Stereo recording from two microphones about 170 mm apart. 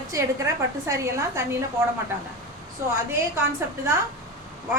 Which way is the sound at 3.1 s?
15° right (ahead or behind).